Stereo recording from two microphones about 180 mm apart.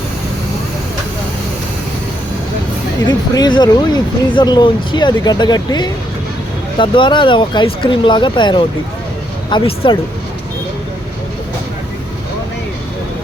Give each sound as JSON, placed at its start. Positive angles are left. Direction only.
{"t": 3.1, "sound": "speech", "side_deg": 20}